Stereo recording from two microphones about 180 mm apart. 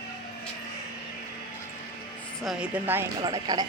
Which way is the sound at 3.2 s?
20° right (ahead or behind).